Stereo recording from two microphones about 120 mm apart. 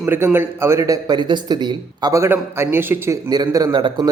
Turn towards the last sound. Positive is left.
turn(degrees=-30)  # may be behind; listen again after turning